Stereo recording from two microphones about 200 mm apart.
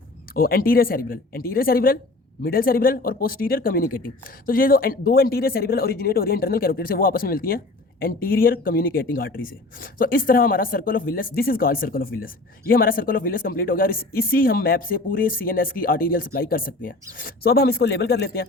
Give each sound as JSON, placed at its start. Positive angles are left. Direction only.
{"t": 0.3, "sound": "speech", "side_deg": 45}